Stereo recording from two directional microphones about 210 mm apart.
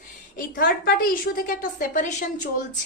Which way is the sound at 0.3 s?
45° left (ahead or behind).